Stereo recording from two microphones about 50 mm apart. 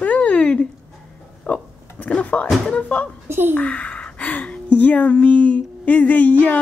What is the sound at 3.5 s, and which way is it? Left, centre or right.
A woman's voice, left.